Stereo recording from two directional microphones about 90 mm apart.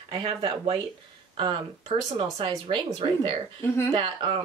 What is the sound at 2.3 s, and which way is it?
Speech, 65° right (ahead or behind).